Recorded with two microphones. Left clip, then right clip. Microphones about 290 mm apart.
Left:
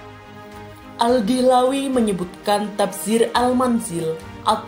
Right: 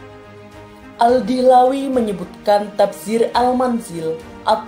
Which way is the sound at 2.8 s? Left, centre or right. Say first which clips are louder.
Right 3 dB; centre.